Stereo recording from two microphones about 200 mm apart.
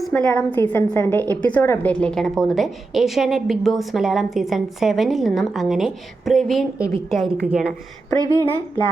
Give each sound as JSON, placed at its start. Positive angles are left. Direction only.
{"t": 0.0, "sound": "a woman's voice", "side_deg": 10}
{"t": 8.2, "sound": "a woman's voice", "side_deg": -15}